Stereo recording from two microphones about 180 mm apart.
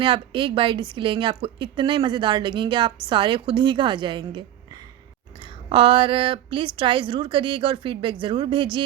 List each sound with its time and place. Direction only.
0.0 s speech: 30° right (ahead or behind)